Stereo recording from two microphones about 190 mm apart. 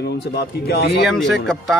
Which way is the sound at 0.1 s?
60° left (ahead or behind).